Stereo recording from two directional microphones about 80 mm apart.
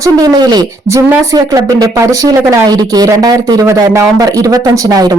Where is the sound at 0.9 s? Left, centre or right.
Right.